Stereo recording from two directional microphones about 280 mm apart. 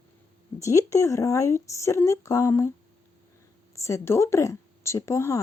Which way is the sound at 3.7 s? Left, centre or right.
Centre.